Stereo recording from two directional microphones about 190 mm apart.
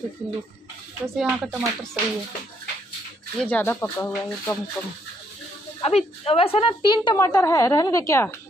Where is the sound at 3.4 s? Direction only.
10° left (ahead or behind).